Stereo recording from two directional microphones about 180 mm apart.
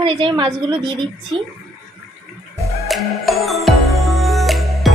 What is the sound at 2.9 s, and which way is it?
Music, centre (ahead or behind).